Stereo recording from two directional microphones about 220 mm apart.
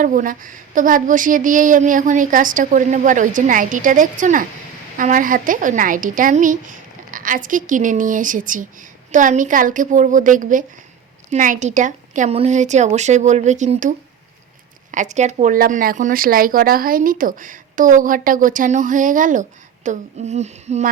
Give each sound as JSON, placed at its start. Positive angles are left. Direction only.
{"t": 0.0, "sound": "speech", "side_deg": -40}
{"t": 14.9, "sound": "speech", "side_deg": -35}